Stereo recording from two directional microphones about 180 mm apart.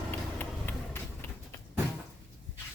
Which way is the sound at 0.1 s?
10° left (ahead or behind).